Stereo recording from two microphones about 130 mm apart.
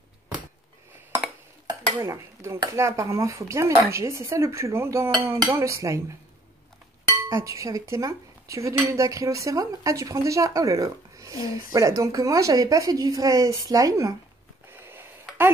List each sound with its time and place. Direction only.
1.2 s dishes: 10° right (ahead or behind)
2.0 s speech: 20° right (ahead or behind)
7.2 s speech: 25° right (ahead or behind)